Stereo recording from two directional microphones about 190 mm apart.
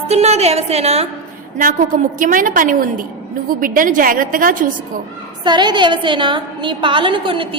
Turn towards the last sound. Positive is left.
turn(degrees=-25)  # may be behind; listen again after turning